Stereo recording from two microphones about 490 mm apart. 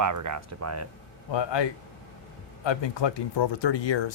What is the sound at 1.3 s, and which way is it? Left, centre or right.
Speech, left.